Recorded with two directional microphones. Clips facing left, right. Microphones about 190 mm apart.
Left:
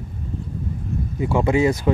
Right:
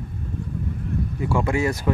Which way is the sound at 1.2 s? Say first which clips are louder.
Left 5 dB; 20° left (ahead or behind).